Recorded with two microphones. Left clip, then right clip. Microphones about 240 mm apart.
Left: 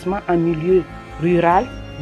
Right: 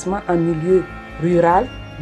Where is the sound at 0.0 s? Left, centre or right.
Left.